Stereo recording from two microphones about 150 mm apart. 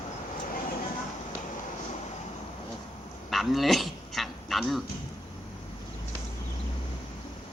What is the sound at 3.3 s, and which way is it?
Dog, centre (ahead or behind).